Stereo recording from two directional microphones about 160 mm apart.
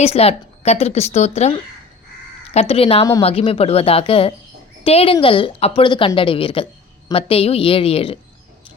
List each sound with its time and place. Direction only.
0.0 s speech: 40° left (ahead or behind)